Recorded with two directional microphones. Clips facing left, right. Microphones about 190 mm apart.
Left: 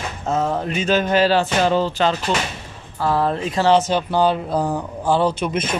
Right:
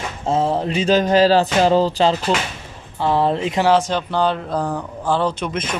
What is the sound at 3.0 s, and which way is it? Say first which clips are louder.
Speech: right 2 dB; 25° right (ahead or behind).